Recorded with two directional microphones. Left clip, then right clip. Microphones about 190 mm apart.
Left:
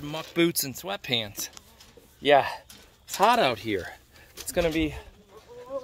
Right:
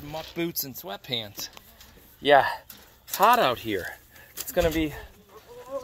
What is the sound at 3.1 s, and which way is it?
Speech, 35° left (ahead or behind).